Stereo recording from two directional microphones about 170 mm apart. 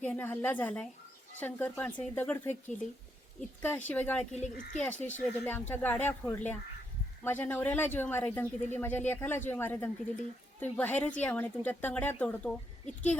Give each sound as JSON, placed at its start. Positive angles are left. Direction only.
{"t": 0.0, "sound": "speech", "side_deg": 10}
{"t": 3.6, "sound": "speech", "side_deg": 10}
{"t": 4.4, "sound": "speech", "side_deg": 45}
{"t": 4.8, "sound": "speech", "side_deg": 10}